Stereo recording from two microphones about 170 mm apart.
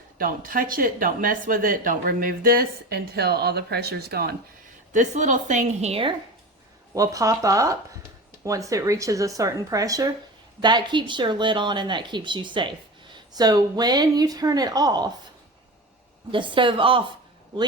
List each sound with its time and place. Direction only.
0.2 s speech: 55° right (ahead or behind)
4.9 s a woman's voice: 45° right (ahead or behind)
6.9 s speech: 20° right (ahead or behind)
16.3 s speech: 30° right (ahead or behind)